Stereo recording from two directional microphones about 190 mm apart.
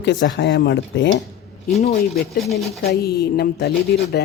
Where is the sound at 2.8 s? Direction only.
55° left (ahead or behind).